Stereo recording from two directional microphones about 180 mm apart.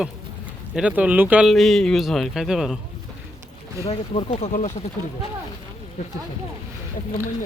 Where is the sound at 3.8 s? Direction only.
30° left (ahead or behind).